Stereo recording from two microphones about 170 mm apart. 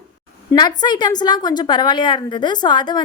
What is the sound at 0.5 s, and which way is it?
A woman's voice, 25° left (ahead or behind).